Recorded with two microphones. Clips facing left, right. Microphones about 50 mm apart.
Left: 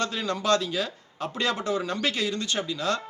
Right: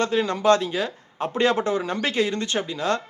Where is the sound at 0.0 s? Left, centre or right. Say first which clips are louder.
Right 7 dB; right.